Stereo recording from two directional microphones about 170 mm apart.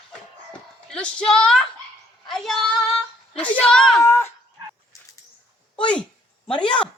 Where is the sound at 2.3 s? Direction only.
Centre (ahead or behind).